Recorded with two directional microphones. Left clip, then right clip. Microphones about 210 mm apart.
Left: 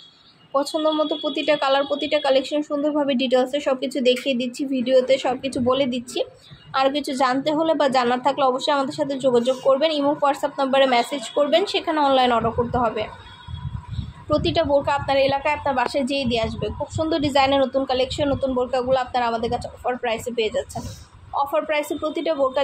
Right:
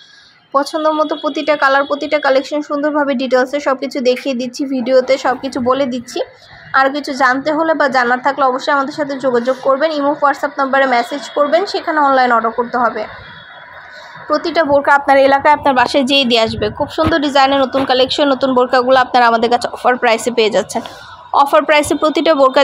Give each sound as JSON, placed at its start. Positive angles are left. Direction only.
{"t": 0.7, "sound": "a woman's voice", "side_deg": -15}
{"t": 14.3, "sound": "a woman's voice", "side_deg": -15}
{"t": 17.1, "sound": "a woman's voice", "side_deg": -15}
{"t": 17.8, "sound": "a woman's voice", "side_deg": -30}